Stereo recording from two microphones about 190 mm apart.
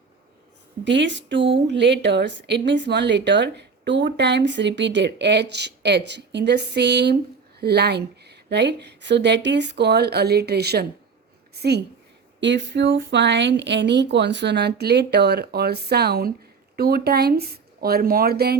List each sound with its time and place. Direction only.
0.9 s a woman's voice: 70° right (ahead or behind)